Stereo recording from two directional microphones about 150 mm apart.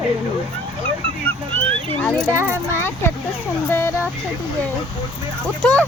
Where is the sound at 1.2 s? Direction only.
10° left (ahead or behind).